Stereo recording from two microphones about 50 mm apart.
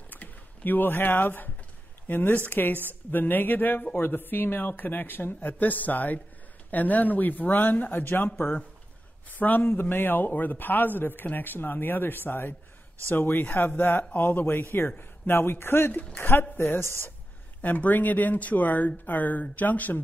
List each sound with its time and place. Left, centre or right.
0.1 s a sound: left
2.0 s speech: left
9.3 s speech: left
17.6 s speech: left